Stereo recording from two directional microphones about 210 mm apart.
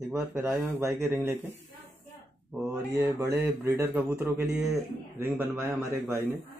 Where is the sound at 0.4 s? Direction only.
10° right (ahead or behind).